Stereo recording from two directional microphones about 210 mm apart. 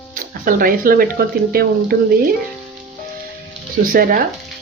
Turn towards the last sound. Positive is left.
turn(degrees=-40)  # may be behind; listen again after turning